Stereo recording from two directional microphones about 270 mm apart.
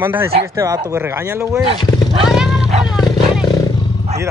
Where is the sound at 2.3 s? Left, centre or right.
Centre.